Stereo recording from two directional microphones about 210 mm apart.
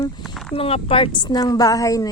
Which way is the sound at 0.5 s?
25° left (ahead or behind).